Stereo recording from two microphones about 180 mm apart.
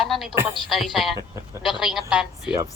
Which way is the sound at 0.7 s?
Centre (ahead or behind).